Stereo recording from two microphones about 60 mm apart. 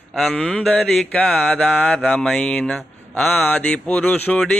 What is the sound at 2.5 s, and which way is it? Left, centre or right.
Mantra, left.